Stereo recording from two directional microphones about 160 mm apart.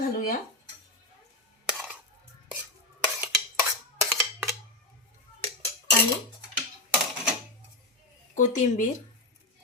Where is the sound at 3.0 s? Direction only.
5° right (ahead or behind).